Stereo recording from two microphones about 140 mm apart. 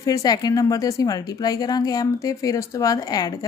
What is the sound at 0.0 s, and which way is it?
A woman's voice, 25° left (ahead or behind).